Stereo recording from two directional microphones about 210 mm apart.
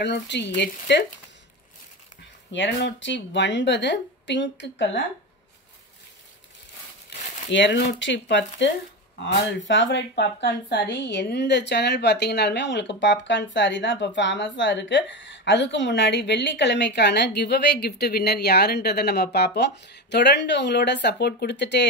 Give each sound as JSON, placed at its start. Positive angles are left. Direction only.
{"t": 0.0, "sound": "speech", "side_deg": 55}
{"t": 2.5, "sound": "speech", "side_deg": 60}
{"t": 7.1, "sound": "speech", "side_deg": 55}